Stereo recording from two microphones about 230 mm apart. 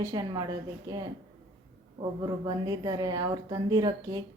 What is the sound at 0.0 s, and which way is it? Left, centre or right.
A woman's voice, centre.